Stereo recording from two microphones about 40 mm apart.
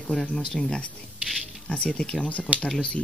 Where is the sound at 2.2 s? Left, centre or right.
Left.